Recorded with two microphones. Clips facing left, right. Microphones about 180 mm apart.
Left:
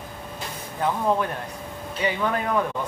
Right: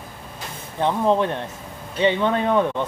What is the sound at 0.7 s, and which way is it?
Speech, 25° right (ahead or behind).